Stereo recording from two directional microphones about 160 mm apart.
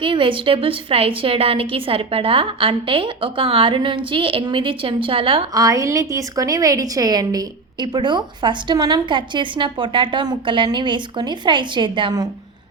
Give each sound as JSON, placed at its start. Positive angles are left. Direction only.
{"t": 0.0, "sound": "a woman's voice", "side_deg": -30}
{"t": 5.5, "sound": "a woman's voice", "side_deg": -20}